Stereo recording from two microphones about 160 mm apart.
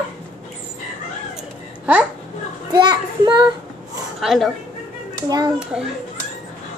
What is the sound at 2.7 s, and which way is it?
Speech, 25° right (ahead or behind).